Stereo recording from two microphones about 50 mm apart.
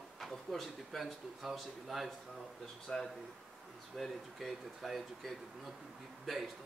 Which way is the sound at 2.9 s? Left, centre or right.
Centre.